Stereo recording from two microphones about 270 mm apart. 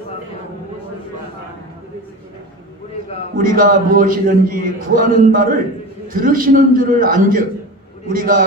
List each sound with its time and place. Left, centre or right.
3.3 s a man's voice: right